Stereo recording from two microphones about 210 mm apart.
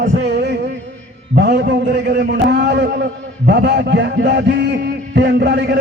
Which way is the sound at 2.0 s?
55° right (ahead or behind).